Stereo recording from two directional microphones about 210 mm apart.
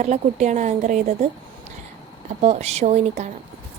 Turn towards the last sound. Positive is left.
turn(degrees=-30)  # may be behind; listen again after turning